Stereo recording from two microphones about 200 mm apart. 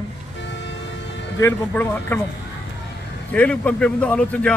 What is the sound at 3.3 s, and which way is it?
A man's voice, 5° left (ahead or behind).